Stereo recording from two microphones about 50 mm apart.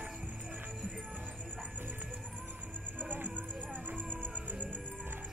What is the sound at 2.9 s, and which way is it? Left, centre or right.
Music, right.